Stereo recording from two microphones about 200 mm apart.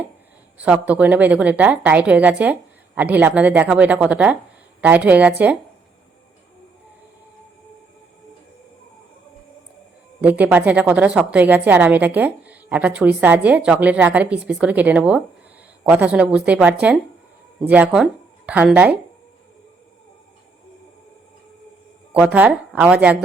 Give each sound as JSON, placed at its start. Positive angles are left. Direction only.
{"t": 0.6, "sound": "a woman's voice", "side_deg": -5}
{"t": 10.2, "sound": "a woman's voice", "side_deg": -10}
{"t": 22.1, "sound": "a woman's voice", "side_deg": -5}